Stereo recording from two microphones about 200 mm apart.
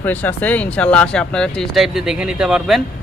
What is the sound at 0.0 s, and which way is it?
Speech, 10° left (ahead or behind).